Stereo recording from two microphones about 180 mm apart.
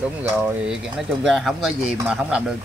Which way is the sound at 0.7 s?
Centre (ahead or behind).